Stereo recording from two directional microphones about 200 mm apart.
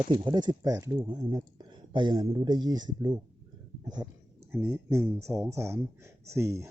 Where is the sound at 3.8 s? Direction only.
20° right (ahead or behind).